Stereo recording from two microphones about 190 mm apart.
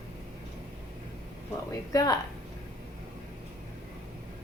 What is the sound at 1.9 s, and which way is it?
Speech, 20° left (ahead or behind).